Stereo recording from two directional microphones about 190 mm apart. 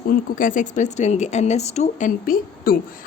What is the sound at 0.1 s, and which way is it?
A woman's voice, 45° left (ahead or behind).